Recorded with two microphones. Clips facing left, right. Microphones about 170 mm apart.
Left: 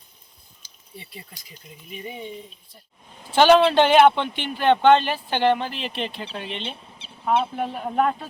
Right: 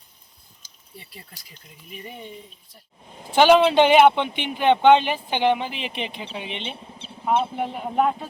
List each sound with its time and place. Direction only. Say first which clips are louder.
0.6 s a sound: left 1 dB; 45° right (ahead or behind)
1.1 s speech: left 3 dB; centre (ahead or behind)
3.2 s speech: even; 15° right (ahead or behind)